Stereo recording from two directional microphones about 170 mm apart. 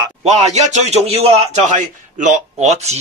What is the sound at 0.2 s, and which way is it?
A man's voice, 40° right (ahead or behind).